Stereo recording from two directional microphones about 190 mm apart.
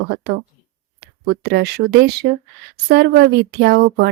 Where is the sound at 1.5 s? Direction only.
60° right (ahead or behind).